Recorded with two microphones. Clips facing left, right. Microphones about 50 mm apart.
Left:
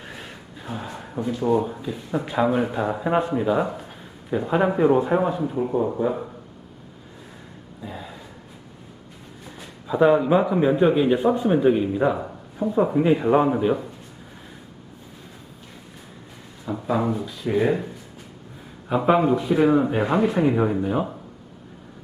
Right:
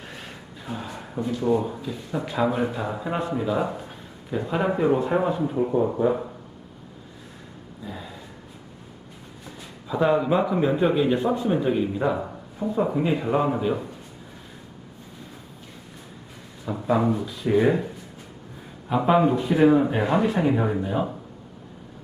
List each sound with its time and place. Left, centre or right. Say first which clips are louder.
0.6 s a man's voice: left 1 dB; centre
7.8 s a sound: left 1 dB; centre
9.8 s a man's voice: left 4 dB; centre
16.6 s speech: right 1 dB; centre
18.9 s speech: left 1 dB; centre
20.5 s speech: left 2 dB; centre